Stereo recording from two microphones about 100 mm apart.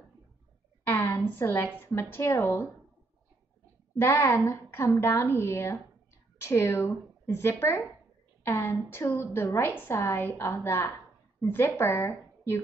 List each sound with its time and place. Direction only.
0.8 s a sound: 25° left (ahead or behind)
1.8 s a woman's voice: 20° left (ahead or behind)
4.0 s a woman's voice: 25° left (ahead or behind)